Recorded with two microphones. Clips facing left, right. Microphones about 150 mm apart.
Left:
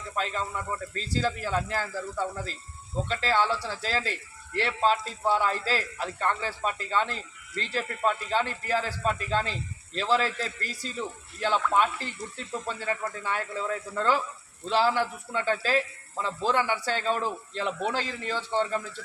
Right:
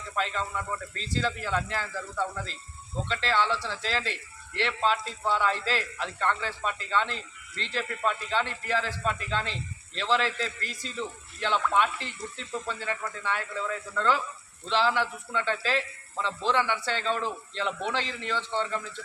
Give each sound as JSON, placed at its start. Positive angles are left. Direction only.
{"t": 0.9, "sound": "speech", "side_deg": 40}
{"t": 3.1, "sound": "a man's voice", "side_deg": 40}